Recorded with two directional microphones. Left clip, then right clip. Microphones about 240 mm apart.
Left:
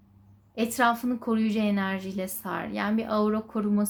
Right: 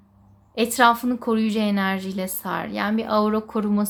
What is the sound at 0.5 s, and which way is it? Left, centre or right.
A woman's voice, centre.